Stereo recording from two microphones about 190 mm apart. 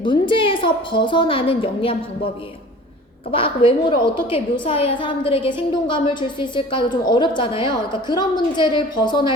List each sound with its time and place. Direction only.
0.0 s a woman's voice: 25° left (ahead or behind)
3.3 s a woman's voice: 30° left (ahead or behind)